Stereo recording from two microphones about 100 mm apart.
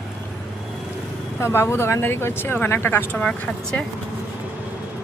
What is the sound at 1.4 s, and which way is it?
Speech, 25° left (ahead or behind).